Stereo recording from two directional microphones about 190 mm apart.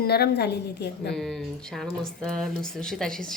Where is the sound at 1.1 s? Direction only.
Centre (ahead or behind).